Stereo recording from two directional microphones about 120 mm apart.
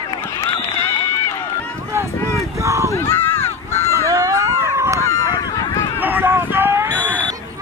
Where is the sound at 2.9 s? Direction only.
20° left (ahead or behind).